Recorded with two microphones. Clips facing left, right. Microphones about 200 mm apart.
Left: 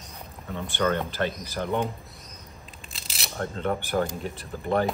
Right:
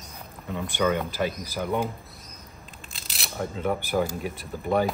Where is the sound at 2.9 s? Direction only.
Centre (ahead or behind).